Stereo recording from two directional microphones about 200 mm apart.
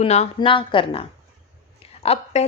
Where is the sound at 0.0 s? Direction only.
35° left (ahead or behind).